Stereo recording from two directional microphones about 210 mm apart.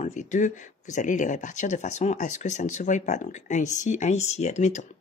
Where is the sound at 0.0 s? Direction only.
35° left (ahead or behind).